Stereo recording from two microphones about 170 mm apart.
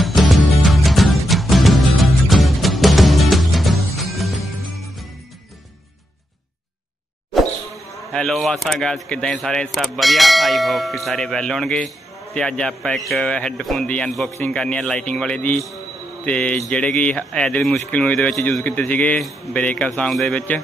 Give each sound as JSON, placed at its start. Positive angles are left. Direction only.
{"t": 0.0, "sound": "music", "side_deg": 0}
{"t": 7.3, "sound": "speech", "side_deg": 0}